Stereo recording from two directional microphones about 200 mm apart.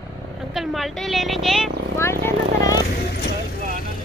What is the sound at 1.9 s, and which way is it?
Speech, 15° left (ahead or behind).